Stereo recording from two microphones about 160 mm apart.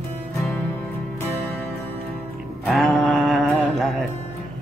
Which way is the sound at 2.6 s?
Centre (ahead or behind).